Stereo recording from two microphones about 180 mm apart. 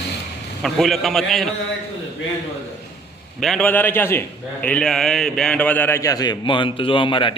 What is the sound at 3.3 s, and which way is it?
A man's voice, centre (ahead or behind).